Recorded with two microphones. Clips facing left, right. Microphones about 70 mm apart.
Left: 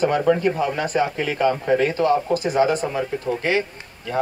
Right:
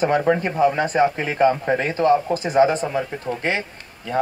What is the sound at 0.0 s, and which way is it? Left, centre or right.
Speech, right.